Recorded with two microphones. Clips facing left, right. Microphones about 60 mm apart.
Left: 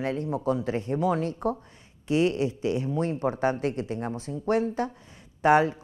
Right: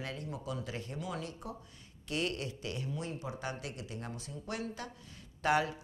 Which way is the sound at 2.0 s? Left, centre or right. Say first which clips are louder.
Left 12 dB; left.